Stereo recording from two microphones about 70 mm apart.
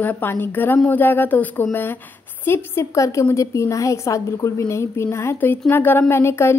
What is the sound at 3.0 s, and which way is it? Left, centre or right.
A woman's voice, left.